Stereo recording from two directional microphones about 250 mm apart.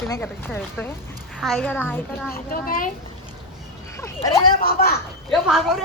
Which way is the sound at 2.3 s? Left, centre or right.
Left.